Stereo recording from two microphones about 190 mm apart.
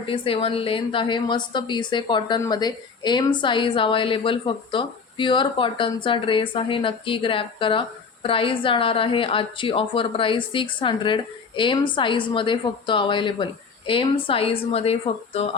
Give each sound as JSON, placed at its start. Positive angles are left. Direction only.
{"t": 0.1, "sound": "speech", "side_deg": 30}